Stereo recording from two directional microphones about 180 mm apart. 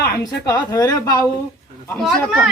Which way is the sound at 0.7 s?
20° left (ahead or behind).